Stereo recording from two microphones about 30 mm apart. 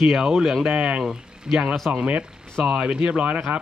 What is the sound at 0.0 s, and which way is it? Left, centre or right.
Speech, centre.